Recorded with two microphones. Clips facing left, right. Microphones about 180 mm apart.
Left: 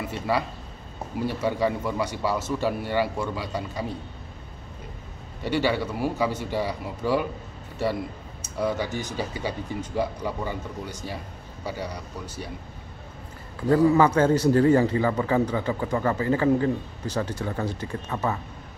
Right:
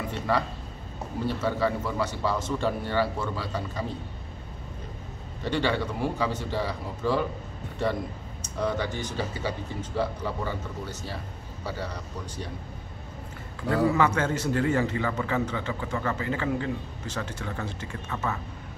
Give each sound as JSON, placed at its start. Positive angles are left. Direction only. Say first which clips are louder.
{"t": 0.3, "sound": "speech", "louder": "left 1 dB", "side_deg": 10}
{"t": 5.4, "sound": "speech", "louder": "left 2 dB", "side_deg": 10}
{"t": 8.5, "sound": "speech", "louder": "left 2 dB", "side_deg": 10}
{"t": 13.9, "sound": "a man's voice", "louder": "left 6 dB", "side_deg": 35}